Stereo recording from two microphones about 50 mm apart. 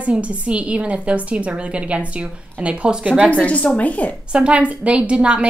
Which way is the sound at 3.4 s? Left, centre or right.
Left.